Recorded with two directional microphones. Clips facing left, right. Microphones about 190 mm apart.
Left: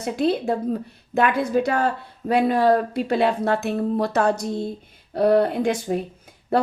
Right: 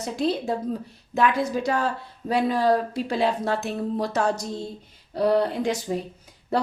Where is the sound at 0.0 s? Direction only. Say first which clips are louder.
Left 4 dB; 60° left (ahead or behind).